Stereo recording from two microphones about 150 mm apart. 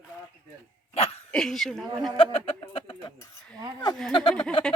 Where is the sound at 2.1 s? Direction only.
35° left (ahead or behind).